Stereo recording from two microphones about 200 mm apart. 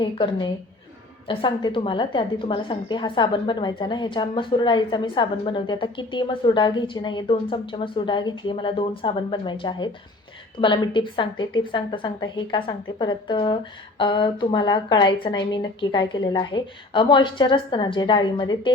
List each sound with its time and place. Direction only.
0.0 s a woman's voice: 25° left (ahead or behind)